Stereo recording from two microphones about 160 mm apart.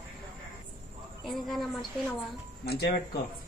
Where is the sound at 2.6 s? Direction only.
90° left.